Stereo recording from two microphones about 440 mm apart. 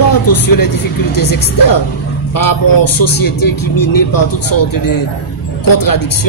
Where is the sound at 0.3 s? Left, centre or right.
Left.